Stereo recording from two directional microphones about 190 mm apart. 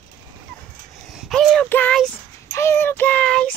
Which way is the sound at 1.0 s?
Centre (ahead or behind).